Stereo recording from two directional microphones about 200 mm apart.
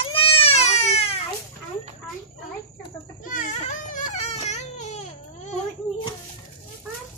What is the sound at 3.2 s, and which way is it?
Baby cry, 40° left (ahead or behind).